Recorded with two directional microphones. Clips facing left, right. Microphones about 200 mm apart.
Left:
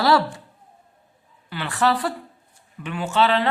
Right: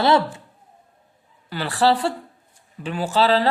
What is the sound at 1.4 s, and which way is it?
Speech, 35° right (ahead or behind).